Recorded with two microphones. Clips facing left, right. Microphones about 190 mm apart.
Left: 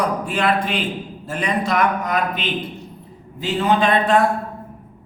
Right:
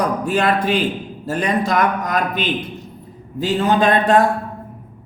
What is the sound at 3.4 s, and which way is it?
Speech, 45° right (ahead or behind).